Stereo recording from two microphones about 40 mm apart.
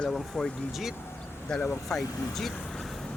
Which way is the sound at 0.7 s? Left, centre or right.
Centre.